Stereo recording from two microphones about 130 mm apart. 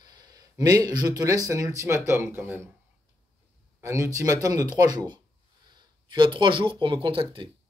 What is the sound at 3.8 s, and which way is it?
Speech, 25° right (ahead or behind).